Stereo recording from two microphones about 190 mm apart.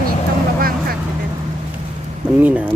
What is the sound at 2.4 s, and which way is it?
Speech, 5° right (ahead or behind).